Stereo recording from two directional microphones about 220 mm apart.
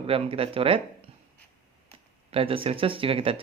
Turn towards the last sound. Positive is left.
turn(degrees=-25)  # may be behind; listen again after turning